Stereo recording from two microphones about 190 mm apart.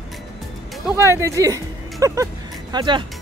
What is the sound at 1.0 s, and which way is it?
Speech, 15° right (ahead or behind).